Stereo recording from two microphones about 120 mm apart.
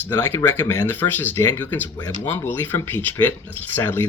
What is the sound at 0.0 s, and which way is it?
Speech, 15° left (ahead or behind).